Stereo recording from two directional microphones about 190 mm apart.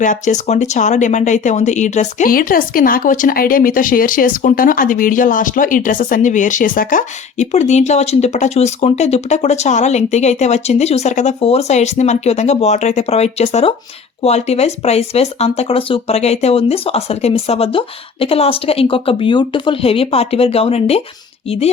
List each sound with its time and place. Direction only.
0.0 s speech: 40° left (ahead or behind)